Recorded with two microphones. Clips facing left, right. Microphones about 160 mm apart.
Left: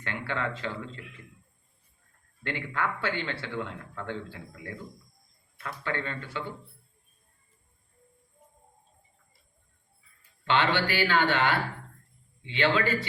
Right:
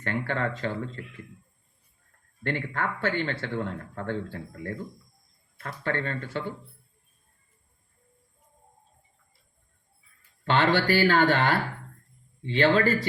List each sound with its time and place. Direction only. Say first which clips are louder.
0.0 s speech: right 4 dB; 45° right (ahead or behind)
2.4 s speech: right 2 dB; 45° right (ahead or behind)
10.4 s speech: right 3 dB; 45° right (ahead or behind)